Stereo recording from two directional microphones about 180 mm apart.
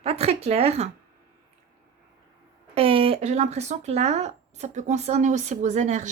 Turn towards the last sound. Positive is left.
turn(degrees=-40)  # may be behind; listen again after turning